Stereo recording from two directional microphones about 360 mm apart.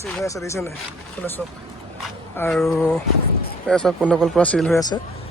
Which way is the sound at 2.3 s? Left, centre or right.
Centre.